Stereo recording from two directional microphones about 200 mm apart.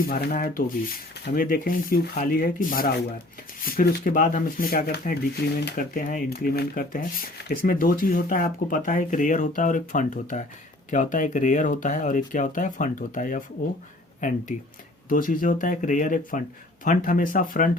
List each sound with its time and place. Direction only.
0.0 s speech: 45° left (ahead or behind)